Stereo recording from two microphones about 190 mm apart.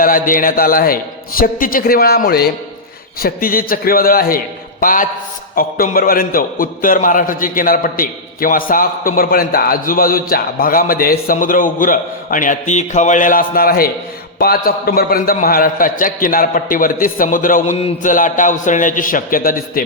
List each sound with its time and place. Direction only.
0.0 s a man's voice: 45° left (ahead or behind)